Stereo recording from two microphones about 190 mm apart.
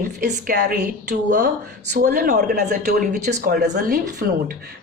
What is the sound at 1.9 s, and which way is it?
A woman's voice, 55° right (ahead or behind).